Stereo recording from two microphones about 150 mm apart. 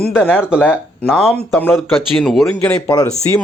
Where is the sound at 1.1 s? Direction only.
Centre (ahead or behind).